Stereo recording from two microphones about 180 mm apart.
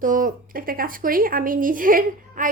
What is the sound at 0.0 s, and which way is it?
Speech, 50° right (ahead or behind).